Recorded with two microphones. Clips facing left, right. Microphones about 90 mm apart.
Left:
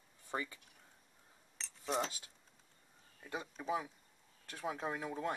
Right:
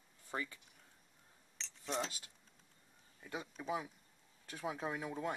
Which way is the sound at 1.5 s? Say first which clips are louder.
Left 3 dB; 5° left (ahead or behind).